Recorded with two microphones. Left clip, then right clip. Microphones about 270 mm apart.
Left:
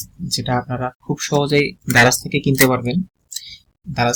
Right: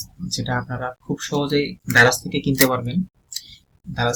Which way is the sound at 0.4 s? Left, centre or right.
Left.